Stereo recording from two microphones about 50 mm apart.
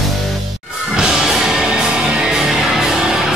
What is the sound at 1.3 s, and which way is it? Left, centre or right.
Music, centre.